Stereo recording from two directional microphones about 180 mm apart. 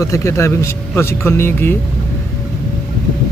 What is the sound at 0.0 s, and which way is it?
Speech, 15° left (ahead or behind).